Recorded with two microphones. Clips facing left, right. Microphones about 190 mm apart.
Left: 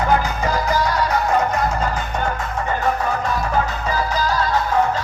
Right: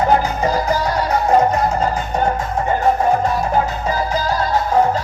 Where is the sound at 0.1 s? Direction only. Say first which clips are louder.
Right 3 dB; 30° right (ahead or behind).